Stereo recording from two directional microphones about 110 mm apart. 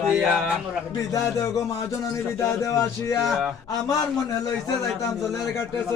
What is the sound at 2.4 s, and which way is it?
Speech, 30° left (ahead or behind).